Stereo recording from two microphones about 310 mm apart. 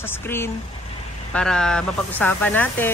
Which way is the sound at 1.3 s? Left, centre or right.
Centre.